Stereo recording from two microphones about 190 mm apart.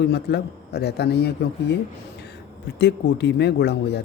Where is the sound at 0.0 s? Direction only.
60° left (ahead or behind).